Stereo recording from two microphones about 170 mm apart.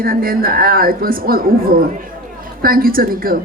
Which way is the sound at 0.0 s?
60° right (ahead or behind).